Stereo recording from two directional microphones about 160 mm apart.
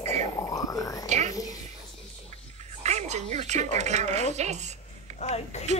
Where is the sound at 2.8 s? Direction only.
45° right (ahead or behind).